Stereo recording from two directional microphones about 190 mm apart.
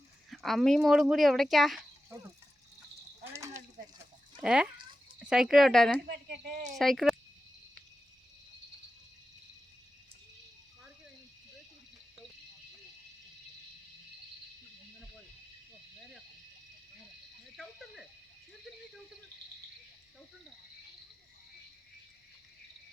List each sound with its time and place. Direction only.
0.3 s speech: centre (ahead or behind)
2.1 s speech: 15° right (ahead or behind)
4.4 s speech: 5° right (ahead or behind)
6.1 s speech: 55° right (ahead or behind)
6.7 s speech: centre (ahead or behind)
17.6 s a sound: centre (ahead or behind)